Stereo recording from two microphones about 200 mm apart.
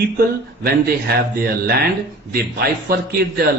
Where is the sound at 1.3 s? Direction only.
50° right (ahead or behind).